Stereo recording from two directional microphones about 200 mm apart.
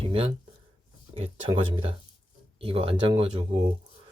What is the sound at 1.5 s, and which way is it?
Speech, 25° right (ahead or behind).